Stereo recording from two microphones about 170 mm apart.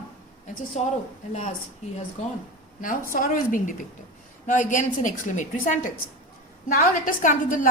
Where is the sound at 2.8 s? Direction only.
55° left (ahead or behind).